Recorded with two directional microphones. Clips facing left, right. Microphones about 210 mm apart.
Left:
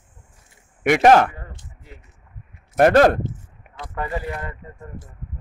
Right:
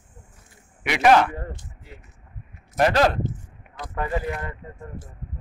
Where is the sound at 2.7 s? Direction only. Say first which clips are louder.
Left 6 dB; 50° left (ahead or behind).